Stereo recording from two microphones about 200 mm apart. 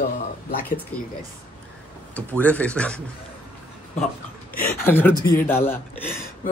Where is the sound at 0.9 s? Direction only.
5° left (ahead or behind).